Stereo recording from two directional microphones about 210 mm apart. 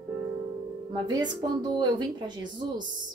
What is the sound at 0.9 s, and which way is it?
Speech, 20° right (ahead or behind).